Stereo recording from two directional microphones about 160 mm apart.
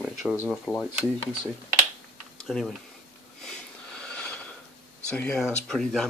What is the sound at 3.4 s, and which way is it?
Wheeze, 5° left (ahead or behind).